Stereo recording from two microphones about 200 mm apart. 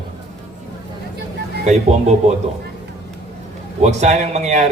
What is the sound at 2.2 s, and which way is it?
Speech, 35° right (ahead or behind).